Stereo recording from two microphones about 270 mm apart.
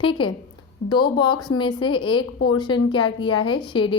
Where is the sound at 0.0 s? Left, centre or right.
Centre.